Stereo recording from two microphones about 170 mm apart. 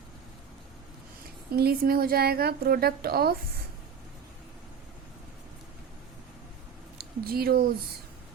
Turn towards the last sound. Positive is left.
turn(degrees=-65)  # may be behind; listen again after turning